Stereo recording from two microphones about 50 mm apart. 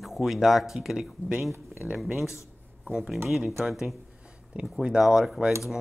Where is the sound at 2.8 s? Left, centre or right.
Centre.